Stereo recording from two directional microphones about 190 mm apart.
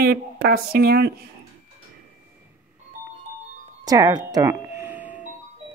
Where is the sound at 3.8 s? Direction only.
20° right (ahead or behind).